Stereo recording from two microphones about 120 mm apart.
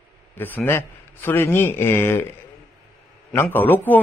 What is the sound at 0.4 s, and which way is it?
A man's voice, 15° left (ahead or behind).